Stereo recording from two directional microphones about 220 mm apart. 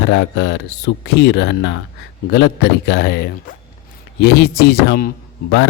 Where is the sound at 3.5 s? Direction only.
40° left (ahead or behind).